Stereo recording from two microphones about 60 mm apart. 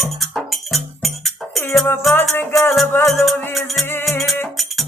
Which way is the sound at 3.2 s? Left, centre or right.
Centre.